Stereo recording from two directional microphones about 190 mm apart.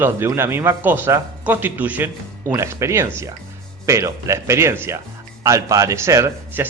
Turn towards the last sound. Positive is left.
turn(degrees=-15)  # may be behind; listen again after turning